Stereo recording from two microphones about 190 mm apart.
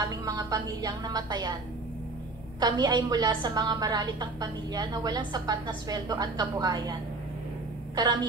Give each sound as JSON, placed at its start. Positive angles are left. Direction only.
{"t": 0.0, "sound": "a woman's voice", "side_deg": -20}
{"t": 2.6, "sound": "a woman's voice", "side_deg": -20}